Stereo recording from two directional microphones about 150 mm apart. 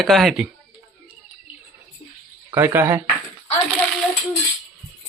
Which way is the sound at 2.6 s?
15° right (ahead or behind).